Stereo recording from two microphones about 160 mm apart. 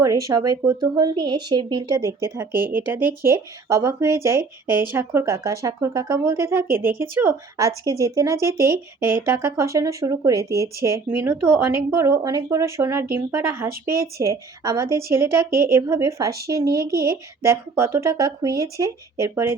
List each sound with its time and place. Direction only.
0.0 s speech: 20° right (ahead or behind)